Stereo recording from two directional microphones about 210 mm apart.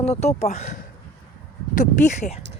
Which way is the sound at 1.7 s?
35° left (ahead or behind).